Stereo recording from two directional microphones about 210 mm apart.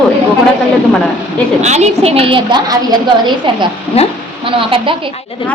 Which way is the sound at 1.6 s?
30° right (ahead or behind).